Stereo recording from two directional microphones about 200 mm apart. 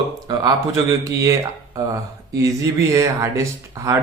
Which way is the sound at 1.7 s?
15° right (ahead or behind).